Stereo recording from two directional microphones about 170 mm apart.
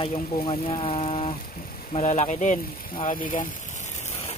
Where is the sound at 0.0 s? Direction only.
30° left (ahead or behind); by 3.4 s 50° left (ahead or behind).